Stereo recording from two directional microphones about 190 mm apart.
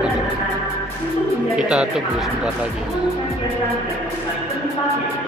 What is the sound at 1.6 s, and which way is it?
Music, 5° right (ahead or behind).